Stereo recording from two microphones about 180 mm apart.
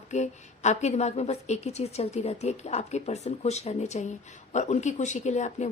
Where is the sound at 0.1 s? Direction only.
40° left (ahead or behind).